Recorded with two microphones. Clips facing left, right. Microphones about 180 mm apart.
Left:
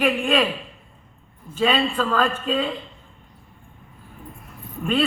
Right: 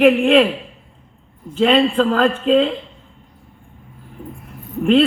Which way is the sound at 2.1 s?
65° right (ahead or behind).